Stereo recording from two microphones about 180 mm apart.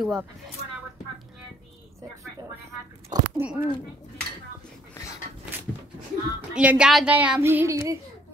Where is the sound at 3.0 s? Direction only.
15° right (ahead or behind).